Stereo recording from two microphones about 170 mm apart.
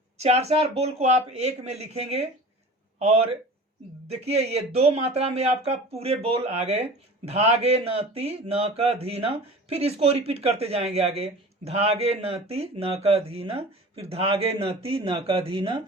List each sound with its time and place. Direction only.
0.2 s a man's voice: 40° right (ahead or behind)